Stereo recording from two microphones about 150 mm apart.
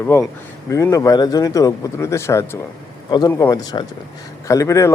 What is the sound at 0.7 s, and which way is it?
Speech, 20° left (ahead or behind).